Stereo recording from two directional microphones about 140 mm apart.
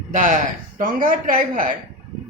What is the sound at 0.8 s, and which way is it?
Speech, 80° right.